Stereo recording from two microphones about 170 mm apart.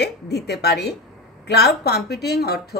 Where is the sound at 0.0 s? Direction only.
75° left (ahead or behind).